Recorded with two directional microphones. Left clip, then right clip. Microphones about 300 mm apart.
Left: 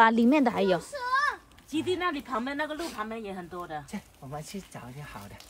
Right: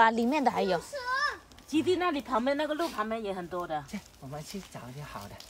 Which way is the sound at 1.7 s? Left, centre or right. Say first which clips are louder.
Right 1 dB; centre.